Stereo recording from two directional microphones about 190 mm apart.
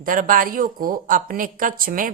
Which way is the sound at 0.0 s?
45° right (ahead or behind).